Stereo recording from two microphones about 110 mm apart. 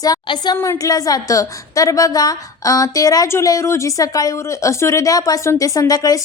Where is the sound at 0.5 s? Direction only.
25° left (ahead or behind).